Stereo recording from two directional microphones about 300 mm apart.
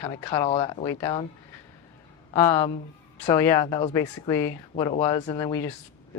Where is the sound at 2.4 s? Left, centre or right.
Centre.